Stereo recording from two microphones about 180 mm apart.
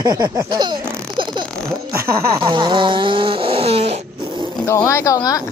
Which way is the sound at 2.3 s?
25° right (ahead or behind).